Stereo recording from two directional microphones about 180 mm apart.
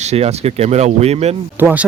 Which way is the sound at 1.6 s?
10° right (ahead or behind).